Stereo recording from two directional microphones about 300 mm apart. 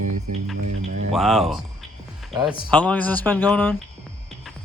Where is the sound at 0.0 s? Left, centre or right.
Right.